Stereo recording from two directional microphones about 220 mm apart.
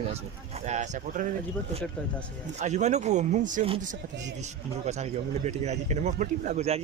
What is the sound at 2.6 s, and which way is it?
Speech, 30° right (ahead or behind).